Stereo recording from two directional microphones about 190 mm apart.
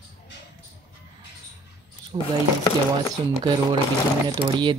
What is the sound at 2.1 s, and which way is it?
Speech, 25° right (ahead or behind).